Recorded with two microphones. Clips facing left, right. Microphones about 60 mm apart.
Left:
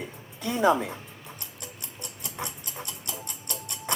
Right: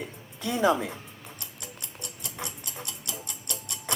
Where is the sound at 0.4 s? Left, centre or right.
Left.